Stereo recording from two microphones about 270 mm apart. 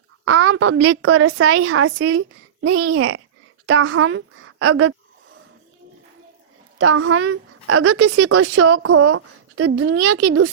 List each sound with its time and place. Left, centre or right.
0.3 s a woman's voice: right
6.7 s a woman's voice: right